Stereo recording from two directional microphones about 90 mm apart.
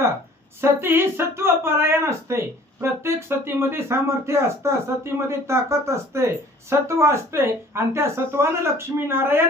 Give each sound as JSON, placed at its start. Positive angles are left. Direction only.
{"t": 0.6, "sound": "speech", "side_deg": -25}